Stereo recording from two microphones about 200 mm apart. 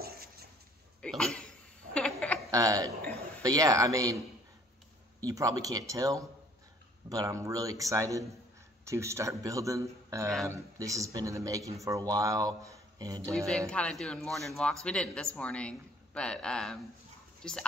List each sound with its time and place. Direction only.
0.0 s a sound: 50° right (ahead or behind)
1.0 s speech: 5° left (ahead or behind)
2.0 s a sound: 5° left (ahead or behind)
2.5 s speech: 15° right (ahead or behind)
5.2 s speech: 15° right (ahead or behind)
13.7 s a man's voice: 5° left (ahead or behind)